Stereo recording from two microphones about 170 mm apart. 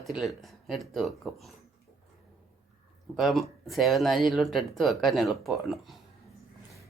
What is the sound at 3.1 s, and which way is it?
Speech, centre (ahead or behind).